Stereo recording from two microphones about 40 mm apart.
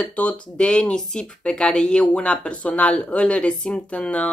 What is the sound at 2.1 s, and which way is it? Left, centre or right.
Speech, left.